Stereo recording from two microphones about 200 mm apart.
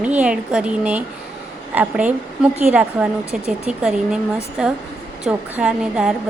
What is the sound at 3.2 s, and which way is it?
Speech, 30° left (ahead or behind).